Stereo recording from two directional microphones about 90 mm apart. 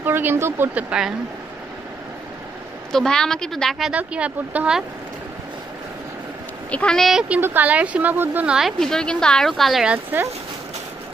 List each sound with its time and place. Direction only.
0.0 s speech: 25° right (ahead or behind)
0.7 s speech: 10° right (ahead or behind)
2.9 s a woman's voice: 5° left (ahead or behind)
3.9 s speech: 15° right (ahead or behind)
6.7 s speech: 15° left (ahead or behind)
7.0 s a woman's voice: centre (ahead or behind)
7.2 s speech: 20° right (ahead or behind)
8.5 s a woman's voice: centre (ahead or behind)
10.1 s speech: 20° right (ahead or behind)